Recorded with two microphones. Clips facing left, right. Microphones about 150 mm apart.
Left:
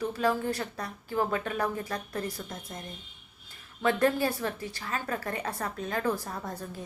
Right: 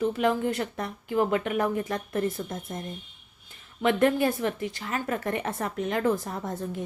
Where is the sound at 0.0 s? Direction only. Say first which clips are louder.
Right 4 dB; 20° right (ahead or behind).